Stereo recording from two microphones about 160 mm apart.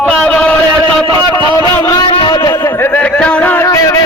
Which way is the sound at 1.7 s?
15° left (ahead or behind).